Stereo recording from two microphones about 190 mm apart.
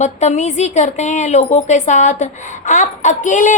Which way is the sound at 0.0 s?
35° left (ahead or behind).